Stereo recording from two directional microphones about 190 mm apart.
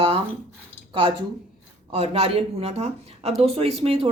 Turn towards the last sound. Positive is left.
turn(degrees=-30)  # may be behind; listen again after turning